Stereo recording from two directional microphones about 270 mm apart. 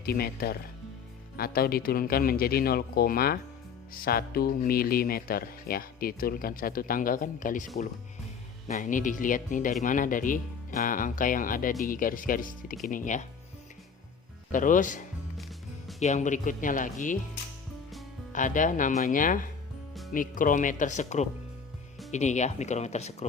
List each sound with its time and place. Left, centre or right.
0.0 s speech: left
14.5 s speech: left
18.3 s speech: left